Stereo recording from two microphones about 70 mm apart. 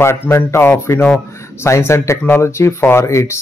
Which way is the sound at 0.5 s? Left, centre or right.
Left.